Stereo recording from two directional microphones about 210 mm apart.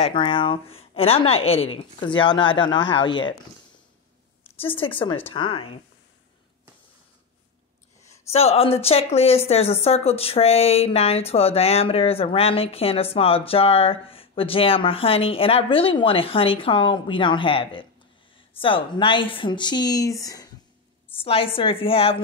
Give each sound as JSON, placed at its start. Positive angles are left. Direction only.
{"t": 0.0, "sound": "a woman's voice", "side_deg": 25}
{"t": 4.6, "sound": "a woman's voice", "side_deg": 25}
{"t": 8.3, "sound": "a woman's voice", "side_deg": 30}